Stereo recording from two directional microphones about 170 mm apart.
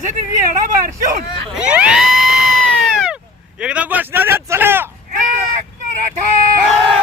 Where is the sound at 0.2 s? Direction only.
50° right (ahead or behind).